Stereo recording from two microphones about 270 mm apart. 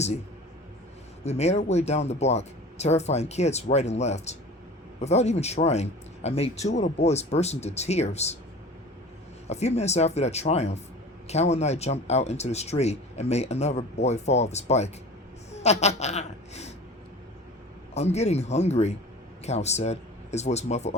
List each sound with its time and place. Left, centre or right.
1.2 s speech: left
9.5 s a woman's voice: left
17.9 s speech: left